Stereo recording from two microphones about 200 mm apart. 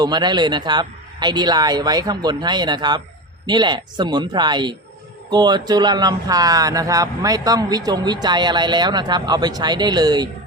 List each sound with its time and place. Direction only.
0.0 s speech: 20° right (ahead or behind)